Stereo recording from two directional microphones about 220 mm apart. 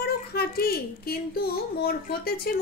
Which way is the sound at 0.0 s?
45° left (ahead or behind).